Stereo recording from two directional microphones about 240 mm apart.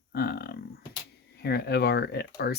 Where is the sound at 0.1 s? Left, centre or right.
Left.